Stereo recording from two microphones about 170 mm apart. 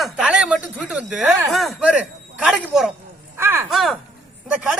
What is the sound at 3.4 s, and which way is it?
Speech, 15° right (ahead or behind).